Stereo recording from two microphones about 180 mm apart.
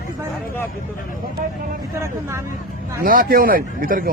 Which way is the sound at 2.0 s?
15° right (ahead or behind).